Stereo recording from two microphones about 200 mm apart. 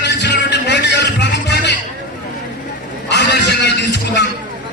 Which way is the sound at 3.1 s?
60° left (ahead or behind).